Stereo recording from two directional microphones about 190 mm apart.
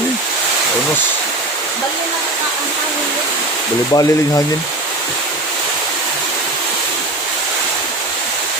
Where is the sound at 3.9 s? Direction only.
20° left (ahead or behind).